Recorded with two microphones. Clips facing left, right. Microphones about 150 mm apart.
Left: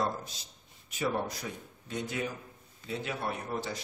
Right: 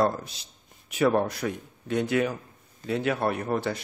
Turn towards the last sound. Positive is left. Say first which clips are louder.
# right 8 dB
turn(degrees=-60)  # may be behind; listen again after turning